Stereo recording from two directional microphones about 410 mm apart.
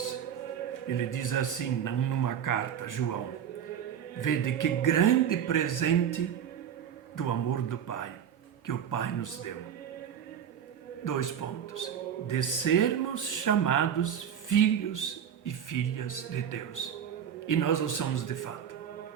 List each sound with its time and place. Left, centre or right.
0.9 s speech: left
4.2 s speech: left
11.0 s a man's voice: left
12.3 s speech: left